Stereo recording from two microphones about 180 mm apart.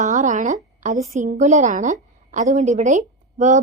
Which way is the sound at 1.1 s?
40° right (ahead or behind).